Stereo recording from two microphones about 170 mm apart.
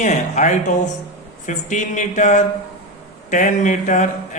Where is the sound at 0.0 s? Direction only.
45° left (ahead or behind).